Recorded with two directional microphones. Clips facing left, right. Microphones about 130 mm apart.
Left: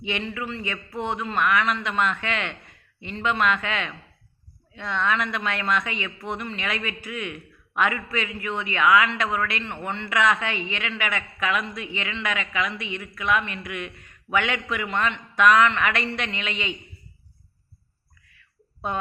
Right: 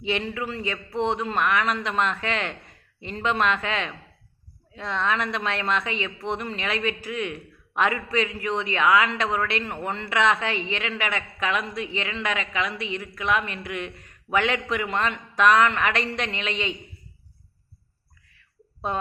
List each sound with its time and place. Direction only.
0.0 s speech: 35° right (ahead or behind)